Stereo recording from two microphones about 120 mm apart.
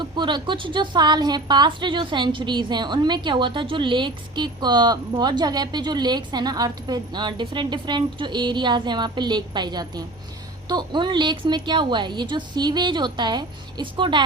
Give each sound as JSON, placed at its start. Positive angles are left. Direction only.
{"t": 0.0, "sound": "a woman's voice", "side_deg": -40}